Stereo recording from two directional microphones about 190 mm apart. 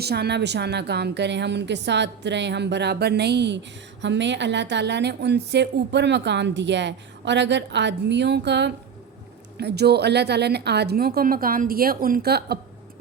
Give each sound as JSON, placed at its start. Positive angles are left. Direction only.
{"t": 0.0, "sound": "a woman's voice", "side_deg": -60}